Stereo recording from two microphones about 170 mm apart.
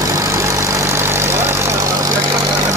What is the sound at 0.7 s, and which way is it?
Vehicle, 15° right (ahead or behind).